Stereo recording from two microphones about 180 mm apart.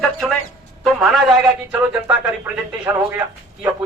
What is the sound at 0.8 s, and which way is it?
A man's voice, centre (ahead or behind).